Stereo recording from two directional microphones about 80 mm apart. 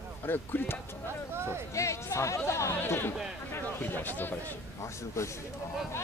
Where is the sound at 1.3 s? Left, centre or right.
Right.